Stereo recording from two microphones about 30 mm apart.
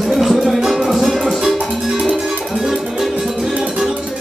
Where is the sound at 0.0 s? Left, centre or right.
Centre.